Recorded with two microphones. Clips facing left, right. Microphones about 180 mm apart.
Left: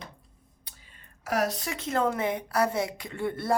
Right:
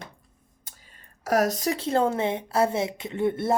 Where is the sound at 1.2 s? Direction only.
40° right (ahead or behind); by 3.5 s 20° right (ahead or behind).